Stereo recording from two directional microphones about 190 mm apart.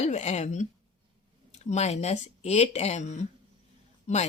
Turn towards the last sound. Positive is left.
turn(degrees=35)  # may be behind; listen again after turning